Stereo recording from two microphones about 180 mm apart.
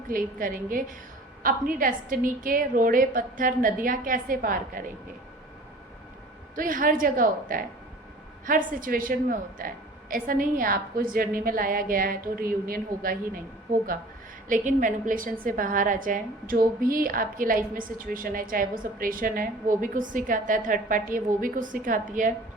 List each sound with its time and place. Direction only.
0.1 s a woman's voice: 50° right (ahead or behind)
6.6 s a woman's voice: 50° right (ahead or behind)
14.4 s a woman's voice: 45° right (ahead or behind)